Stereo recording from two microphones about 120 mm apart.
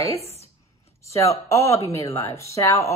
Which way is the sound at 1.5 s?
25° left (ahead or behind).